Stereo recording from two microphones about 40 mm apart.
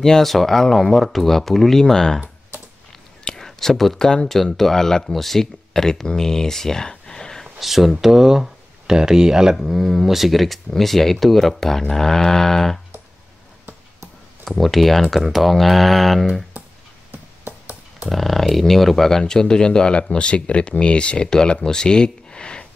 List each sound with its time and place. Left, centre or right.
0.0 s speech: centre
3.3 s speech: centre
7.6 s speech: centre
9.6 s speech: centre
14.4 s speech: centre
18.1 s speech: centre; by 21.5 s left
21.6 s a sound: centre